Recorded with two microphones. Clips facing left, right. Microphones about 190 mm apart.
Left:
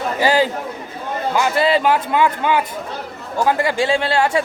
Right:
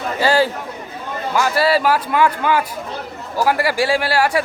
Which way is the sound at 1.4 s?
20° left (ahead or behind).